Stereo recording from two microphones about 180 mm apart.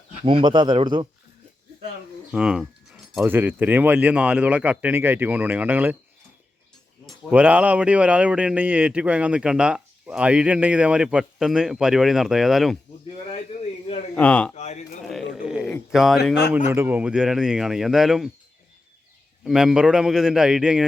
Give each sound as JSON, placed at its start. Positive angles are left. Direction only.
{"t": 0.3, "sound": "speech", "side_deg": -25}
{"t": 2.3, "sound": "speech", "side_deg": -5}
{"t": 7.0, "sound": "speech", "side_deg": -5}
{"t": 13.8, "sound": "a sound", "side_deg": 40}
{"t": 14.2, "sound": "speech", "side_deg": 5}
{"t": 14.5, "sound": "speech", "side_deg": 40}
{"t": 15.0, "sound": "a sound", "side_deg": 0}
{"t": 15.9, "sound": "speech", "side_deg": 0}
{"t": 16.6, "sound": "speech", "side_deg": -15}
{"t": 19.5, "sound": "speech", "side_deg": -5}